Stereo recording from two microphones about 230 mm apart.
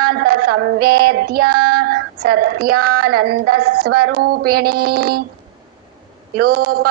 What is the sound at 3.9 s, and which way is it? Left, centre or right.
Speech, right.